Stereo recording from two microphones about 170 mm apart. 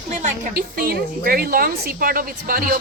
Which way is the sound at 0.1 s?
55° right (ahead or behind).